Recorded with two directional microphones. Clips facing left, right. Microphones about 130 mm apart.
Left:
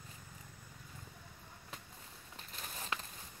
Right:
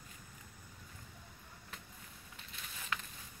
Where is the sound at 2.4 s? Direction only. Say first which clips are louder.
Left 4 dB; 40° left (ahead or behind).